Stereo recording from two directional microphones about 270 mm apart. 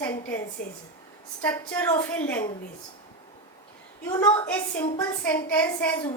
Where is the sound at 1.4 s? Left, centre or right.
Centre.